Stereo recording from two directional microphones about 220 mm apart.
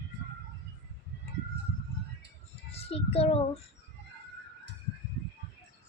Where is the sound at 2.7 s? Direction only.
25° left (ahead or behind).